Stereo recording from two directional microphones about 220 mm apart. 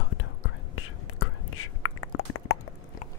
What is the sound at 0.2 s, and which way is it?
Whispering, 70° left (ahead or behind).